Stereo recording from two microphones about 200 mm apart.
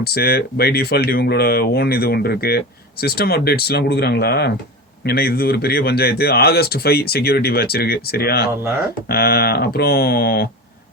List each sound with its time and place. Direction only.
0.0 s speech: 50° left (ahead or behind)